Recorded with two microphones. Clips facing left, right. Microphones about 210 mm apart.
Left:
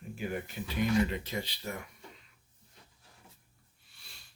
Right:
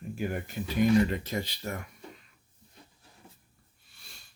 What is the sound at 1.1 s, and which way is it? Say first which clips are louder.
Speech: right 4 dB; 45° right (ahead or behind).